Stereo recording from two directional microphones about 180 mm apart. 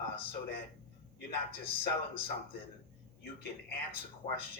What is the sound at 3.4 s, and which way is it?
Speech, 60° left (ahead or behind).